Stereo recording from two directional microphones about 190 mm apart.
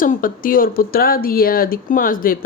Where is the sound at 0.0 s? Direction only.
45° left (ahead or behind).